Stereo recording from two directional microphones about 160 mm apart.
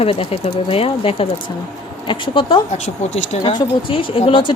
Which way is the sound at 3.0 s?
45° left (ahead or behind).